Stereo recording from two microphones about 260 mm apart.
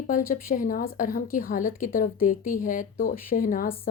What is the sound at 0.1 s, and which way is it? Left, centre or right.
A woman's voice, left.